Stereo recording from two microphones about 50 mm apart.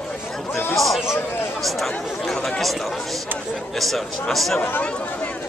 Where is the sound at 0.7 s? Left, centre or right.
Centre.